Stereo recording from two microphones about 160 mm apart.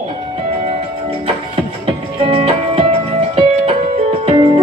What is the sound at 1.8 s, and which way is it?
Music, 35° right (ahead or behind).